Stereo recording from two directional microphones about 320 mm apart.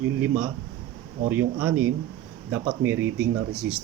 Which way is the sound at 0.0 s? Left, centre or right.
Centre.